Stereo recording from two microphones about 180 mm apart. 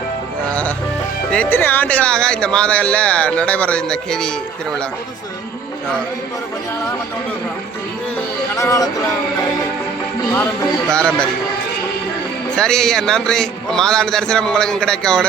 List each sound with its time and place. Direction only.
1.3 s speech: 10° left (ahead or behind)
8.5 s speech: 15° left (ahead or behind)
10.9 s a man's voice: 5° left (ahead or behind)
12.5 s a man's voice: 5° left (ahead or behind)